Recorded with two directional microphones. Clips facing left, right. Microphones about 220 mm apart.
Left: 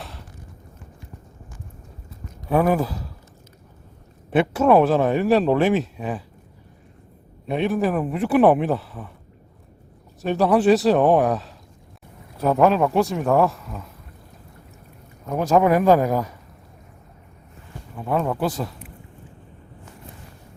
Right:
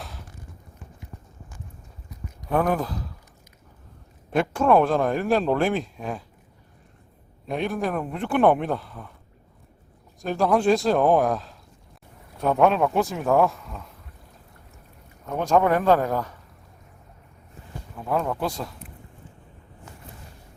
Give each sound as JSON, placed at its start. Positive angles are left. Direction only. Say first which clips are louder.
{"t": 0.0, "sound": "a sound", "louder": "left 2 dB", "side_deg": 0}
{"t": 2.5, "sound": "speech", "louder": "left 4 dB", "side_deg": 5}
{"t": 4.3, "sound": "a man's voice", "louder": "left 3 dB", "side_deg": 5}
{"t": 7.4, "sound": "a man's voice", "louder": "left 5 dB", "side_deg": 5}
{"t": 10.2, "sound": "a man's voice", "louder": "left 3 dB", "side_deg": 0}
{"t": 15.3, "sound": "speech", "louder": "left 3 dB", "side_deg": 5}
{"t": 17.9, "sound": "a man's voice", "louder": "left 3 dB", "side_deg": 5}